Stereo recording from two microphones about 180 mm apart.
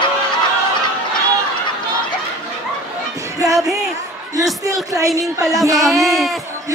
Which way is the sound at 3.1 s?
20° right (ahead or behind).